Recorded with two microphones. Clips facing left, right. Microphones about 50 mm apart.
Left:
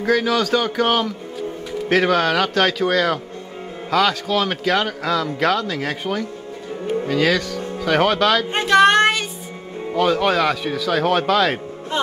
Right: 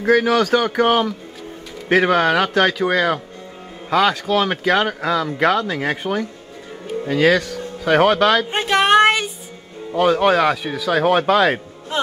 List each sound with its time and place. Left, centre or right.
0.0 s a man's voice: right
8.5 s child singing: centre
9.9 s speech: right